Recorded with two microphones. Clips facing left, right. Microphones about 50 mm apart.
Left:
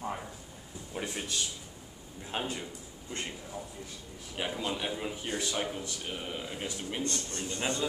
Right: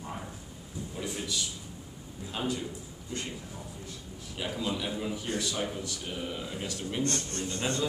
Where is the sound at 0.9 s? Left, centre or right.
Left.